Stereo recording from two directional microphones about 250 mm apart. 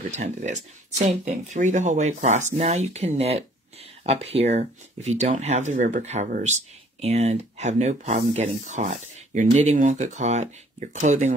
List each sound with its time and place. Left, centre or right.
0.1 s speech: right